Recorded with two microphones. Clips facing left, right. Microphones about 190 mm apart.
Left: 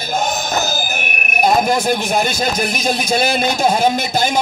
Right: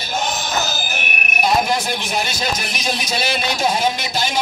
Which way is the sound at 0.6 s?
50° left (ahead or behind).